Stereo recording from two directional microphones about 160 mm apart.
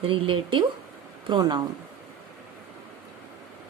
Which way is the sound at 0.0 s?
35° right (ahead or behind).